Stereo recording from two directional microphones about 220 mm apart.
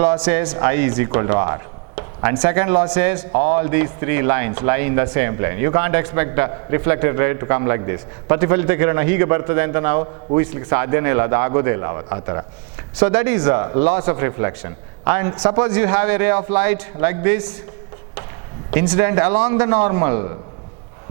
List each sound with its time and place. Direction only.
0.0 s speech: 10° right (ahead or behind)
18.7 s speech: 15° right (ahead or behind)